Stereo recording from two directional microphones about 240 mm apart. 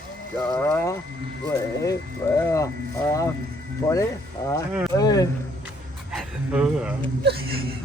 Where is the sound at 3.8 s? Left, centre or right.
Centre.